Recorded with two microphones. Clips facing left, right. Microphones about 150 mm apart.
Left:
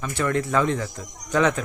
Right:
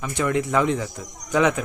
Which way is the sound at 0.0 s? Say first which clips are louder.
Right 1 dB; 15° right (ahead or behind).